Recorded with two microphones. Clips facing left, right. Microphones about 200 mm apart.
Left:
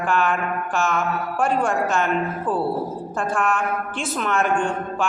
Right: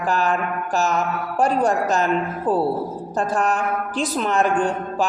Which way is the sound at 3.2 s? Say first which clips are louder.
Right 2 dB; 40° right (ahead or behind).